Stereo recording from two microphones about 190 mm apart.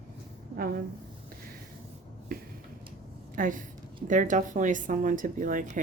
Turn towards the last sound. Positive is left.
turn(degrees=-45)  # may be behind; listen again after turning